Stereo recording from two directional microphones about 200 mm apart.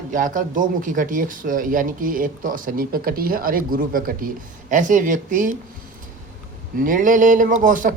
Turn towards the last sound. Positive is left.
turn(degrees=-40)  # may be behind; listen again after turning